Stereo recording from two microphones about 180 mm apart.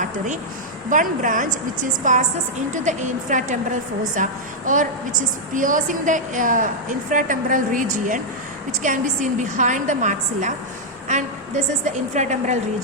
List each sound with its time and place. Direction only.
0.9 s a woman's voice: 45° right (ahead or behind)
12.1 s a woman's voice: 40° right (ahead or behind)